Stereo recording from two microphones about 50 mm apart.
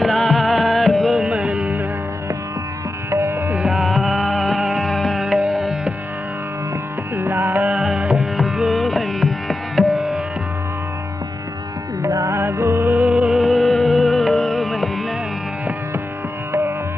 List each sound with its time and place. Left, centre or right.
0.0 s music: centre
1.4 s music: right
3.1 s music: right
3.6 s music: centre
5.4 s music: right
7.2 s music: right
8.9 s music: centre
9.8 s music: right
12.0 s music: right
13.1 s music: centre